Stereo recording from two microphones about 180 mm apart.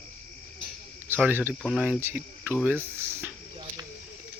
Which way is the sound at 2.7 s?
15° right (ahead or behind).